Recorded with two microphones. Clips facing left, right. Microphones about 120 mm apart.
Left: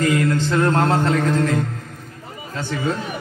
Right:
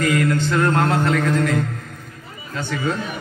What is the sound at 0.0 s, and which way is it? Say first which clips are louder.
Music: even; 30° left (ahead or behind).